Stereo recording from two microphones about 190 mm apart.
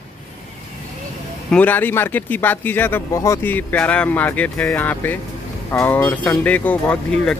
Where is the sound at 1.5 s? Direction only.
10° left (ahead or behind).